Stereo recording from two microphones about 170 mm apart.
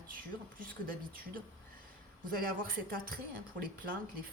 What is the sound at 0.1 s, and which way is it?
Speech, 55° right (ahead or behind).